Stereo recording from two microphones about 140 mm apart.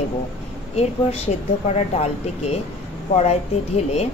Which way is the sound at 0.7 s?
45° left (ahead or behind).